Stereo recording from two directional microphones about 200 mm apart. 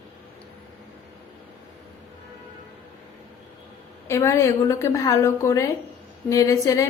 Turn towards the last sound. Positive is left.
turn(degrees=15)  # may be behind; listen again after turning